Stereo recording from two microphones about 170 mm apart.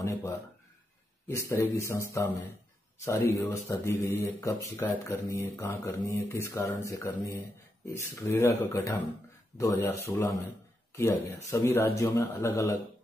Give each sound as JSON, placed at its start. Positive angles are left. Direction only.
{"t": 0.0, "sound": "speech", "side_deg": 15}